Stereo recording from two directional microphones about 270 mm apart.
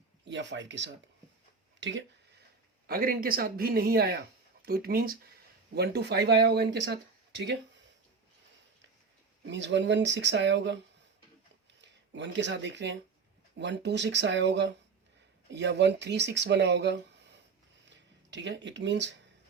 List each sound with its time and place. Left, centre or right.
0.3 s speech: right
9.5 s speech: right
11.8 s speech: right